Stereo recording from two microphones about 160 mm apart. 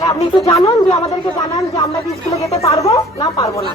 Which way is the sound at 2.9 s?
20° left (ahead or behind).